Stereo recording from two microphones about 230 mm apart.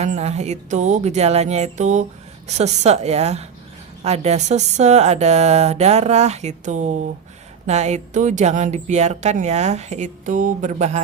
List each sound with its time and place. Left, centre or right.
0.0 s speech: right